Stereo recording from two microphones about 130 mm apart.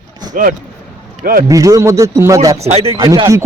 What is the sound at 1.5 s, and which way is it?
Speech, 25° right (ahead or behind).